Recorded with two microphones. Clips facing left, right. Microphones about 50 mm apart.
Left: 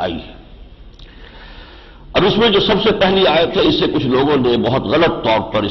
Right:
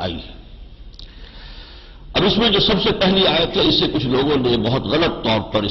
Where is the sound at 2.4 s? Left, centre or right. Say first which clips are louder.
Left 4 dB; left.